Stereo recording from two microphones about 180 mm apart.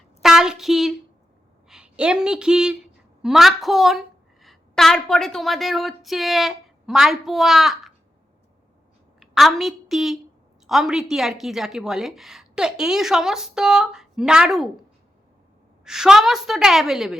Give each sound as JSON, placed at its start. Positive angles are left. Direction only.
{"t": 0.2, "sound": "a woman's voice", "side_deg": 0}
{"t": 9.2, "sound": "a woman's voice", "side_deg": 0}
{"t": 15.8, "sound": "a woman's voice", "side_deg": -5}